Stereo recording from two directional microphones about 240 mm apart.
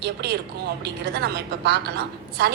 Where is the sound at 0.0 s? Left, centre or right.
Right.